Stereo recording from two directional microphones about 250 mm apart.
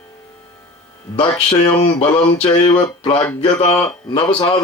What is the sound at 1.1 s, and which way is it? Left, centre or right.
Speech, centre.